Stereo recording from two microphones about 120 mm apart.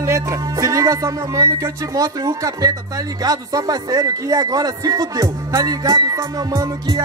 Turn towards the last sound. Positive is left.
turn(degrees=-30)  # may be behind; listen again after turning